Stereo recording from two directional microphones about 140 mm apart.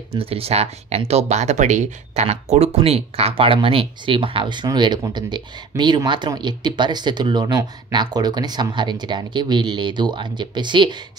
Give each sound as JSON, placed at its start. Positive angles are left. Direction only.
{"t": 0.1, "sound": "speech", "side_deg": -45}